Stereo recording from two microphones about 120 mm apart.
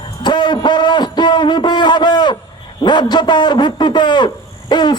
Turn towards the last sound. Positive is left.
turn(degrees=35)  # may be behind; listen again after turning